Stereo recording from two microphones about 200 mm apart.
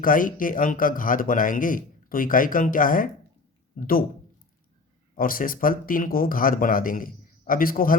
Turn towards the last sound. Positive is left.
turn(degrees=45)  # may be behind; listen again after turning